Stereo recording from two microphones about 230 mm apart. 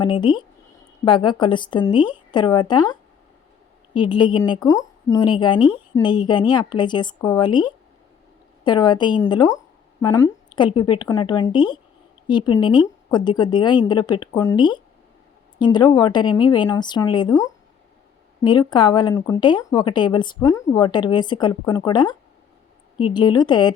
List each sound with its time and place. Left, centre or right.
0.0 s a woman's voice: centre
18.7 s speech: centre